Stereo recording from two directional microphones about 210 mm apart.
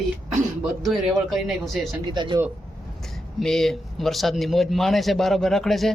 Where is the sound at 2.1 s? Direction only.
20° right (ahead or behind).